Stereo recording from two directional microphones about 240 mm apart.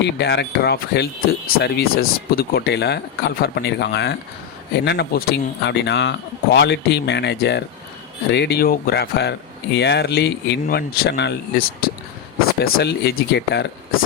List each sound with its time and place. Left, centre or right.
0.0 s speech: left